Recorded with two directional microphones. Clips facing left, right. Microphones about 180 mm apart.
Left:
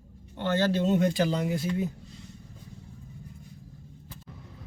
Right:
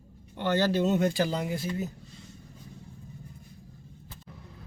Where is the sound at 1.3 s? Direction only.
5° right (ahead or behind).